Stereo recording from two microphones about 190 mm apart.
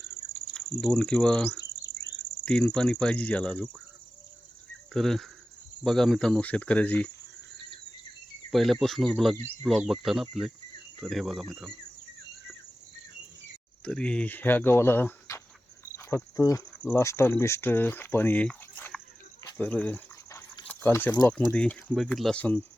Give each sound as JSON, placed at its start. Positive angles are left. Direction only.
{"t": 0.3, "sound": "speech", "side_deg": 5}
{"t": 1.5, "sound": "cricket", "side_deg": 65}
{"t": 2.4, "sound": "speech", "side_deg": 5}
{"t": 4.9, "sound": "speech", "side_deg": 0}
{"t": 8.4, "sound": "speech", "side_deg": 0}
{"t": 13.8, "sound": "speech", "side_deg": 5}
{"t": 16.0, "sound": "cricket", "side_deg": 15}
{"t": 16.8, "sound": "speech", "side_deg": 10}
{"t": 19.5, "sound": "a sound", "side_deg": 5}
{"t": 20.7, "sound": "speech", "side_deg": 10}